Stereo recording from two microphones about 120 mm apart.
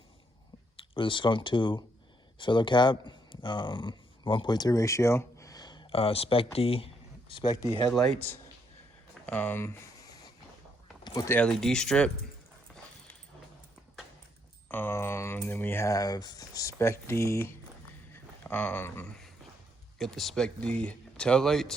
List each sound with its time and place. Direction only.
0.8 s speech: 45° left (ahead or behind)
5.9 s speech: 55° left (ahead or behind)
7.9 s speech: 5° left (ahead or behind)
9.2 s speech: 15° left (ahead or behind)
11.0 s a sound: 30° left (ahead or behind)
11.3 s speech: 5° left (ahead or behind)
14.7 s speech: 20° left (ahead or behind)
20.0 s speech: centre (ahead or behind)